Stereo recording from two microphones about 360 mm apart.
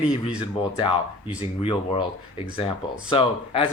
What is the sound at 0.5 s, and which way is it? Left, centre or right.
Speech, centre.